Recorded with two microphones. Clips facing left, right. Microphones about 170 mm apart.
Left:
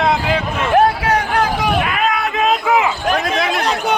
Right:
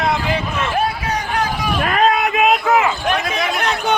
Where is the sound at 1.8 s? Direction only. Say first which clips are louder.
Right 3 dB; 40° right (ahead or behind).